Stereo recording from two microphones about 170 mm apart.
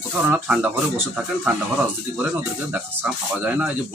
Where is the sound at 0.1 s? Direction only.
10° right (ahead or behind).